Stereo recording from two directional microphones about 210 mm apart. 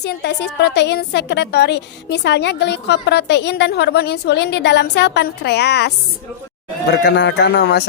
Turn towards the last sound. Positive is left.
turn(degrees=50)  # may be behind; listen again after turning